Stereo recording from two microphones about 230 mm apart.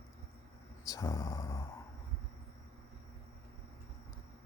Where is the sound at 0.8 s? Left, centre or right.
Centre.